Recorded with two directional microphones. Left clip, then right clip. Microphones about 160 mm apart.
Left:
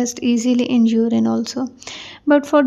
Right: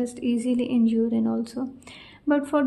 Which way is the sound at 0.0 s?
35° left (ahead or behind).